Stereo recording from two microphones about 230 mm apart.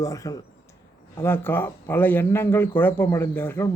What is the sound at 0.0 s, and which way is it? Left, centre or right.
A man's voice, centre.